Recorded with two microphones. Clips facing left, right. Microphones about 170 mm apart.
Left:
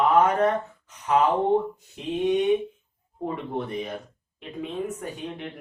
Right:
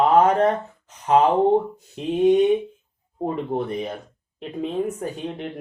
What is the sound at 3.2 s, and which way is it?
Speech, 40° right (ahead or behind).